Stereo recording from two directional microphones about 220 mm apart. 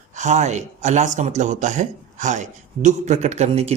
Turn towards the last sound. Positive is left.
turn(degrees=-30)  # may be behind; listen again after turning